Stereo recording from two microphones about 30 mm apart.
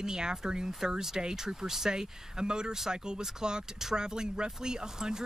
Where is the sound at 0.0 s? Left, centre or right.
Right.